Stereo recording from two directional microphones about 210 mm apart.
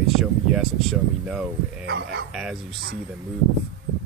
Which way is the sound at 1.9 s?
55° right (ahead or behind).